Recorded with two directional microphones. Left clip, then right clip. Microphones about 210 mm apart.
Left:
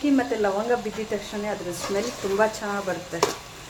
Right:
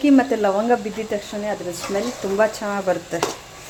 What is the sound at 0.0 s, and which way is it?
Speech, 30° right (ahead or behind).